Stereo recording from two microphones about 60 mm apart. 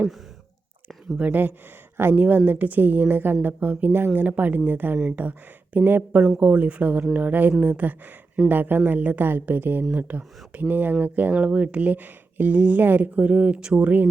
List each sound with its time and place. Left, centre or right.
1.2 s a woman's voice: right